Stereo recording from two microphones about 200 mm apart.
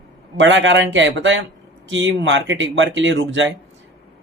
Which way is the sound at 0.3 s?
65° right (ahead or behind).